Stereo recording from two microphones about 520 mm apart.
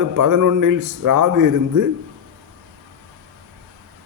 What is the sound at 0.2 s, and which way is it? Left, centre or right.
A man's voice, right.